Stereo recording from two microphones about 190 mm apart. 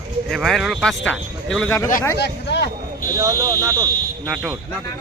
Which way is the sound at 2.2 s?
60° left (ahead or behind).